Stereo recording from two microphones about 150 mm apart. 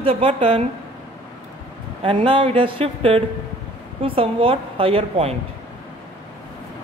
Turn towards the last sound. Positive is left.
turn(degrees=-40)  # may be behind; listen again after turning